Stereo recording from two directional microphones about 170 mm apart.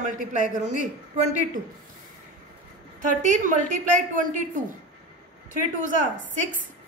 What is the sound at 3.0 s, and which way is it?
A woman's voice, 45° right (ahead or behind).